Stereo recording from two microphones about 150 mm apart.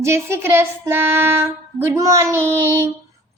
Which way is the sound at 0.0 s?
15° right (ahead or behind).